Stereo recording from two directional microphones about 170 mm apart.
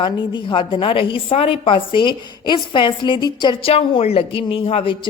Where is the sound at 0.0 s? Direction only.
30° left (ahead or behind).